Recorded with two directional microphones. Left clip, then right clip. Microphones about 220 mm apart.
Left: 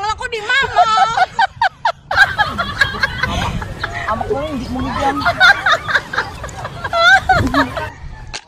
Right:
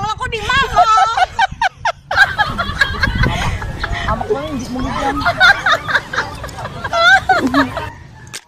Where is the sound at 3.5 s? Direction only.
Centre (ahead or behind).